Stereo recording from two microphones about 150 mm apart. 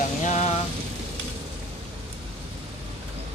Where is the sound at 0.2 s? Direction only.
55° left (ahead or behind).